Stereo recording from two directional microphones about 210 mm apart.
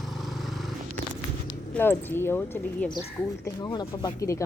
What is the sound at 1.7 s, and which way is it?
Speech, 10° left (ahead or behind).